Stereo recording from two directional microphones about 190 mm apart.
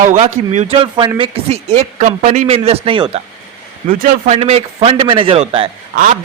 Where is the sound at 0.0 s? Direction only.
40° right (ahead or behind); by 1.3 s 25° right (ahead or behind).